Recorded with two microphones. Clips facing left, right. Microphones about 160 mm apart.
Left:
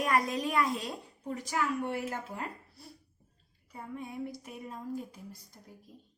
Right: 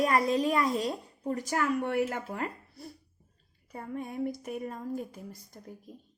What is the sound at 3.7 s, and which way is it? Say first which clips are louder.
A woman's voice: right 4 dB; 55° right (ahead or behind).